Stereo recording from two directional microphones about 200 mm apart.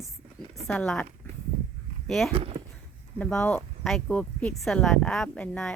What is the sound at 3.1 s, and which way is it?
Speech, 5° left (ahead or behind).